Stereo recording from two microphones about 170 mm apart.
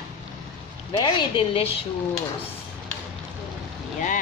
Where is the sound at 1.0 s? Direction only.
30° left (ahead or behind).